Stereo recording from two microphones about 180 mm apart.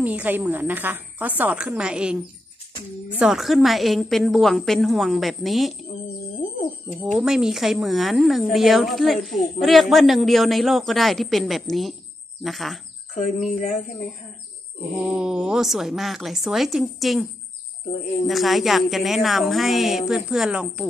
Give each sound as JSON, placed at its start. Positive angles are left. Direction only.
{"t": 0.0, "sound": "a woman's voice", "side_deg": -10}
{"t": 3.2, "sound": "a woman's voice", "side_deg": 0}
{"t": 7.1, "sound": "a woman's voice", "side_deg": -5}
{"t": 13.1, "sound": "speech", "side_deg": 40}
{"t": 15.0, "sound": "a woman's voice", "side_deg": -5}